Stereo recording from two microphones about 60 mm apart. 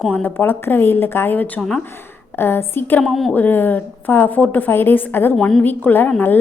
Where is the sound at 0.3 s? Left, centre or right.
Left.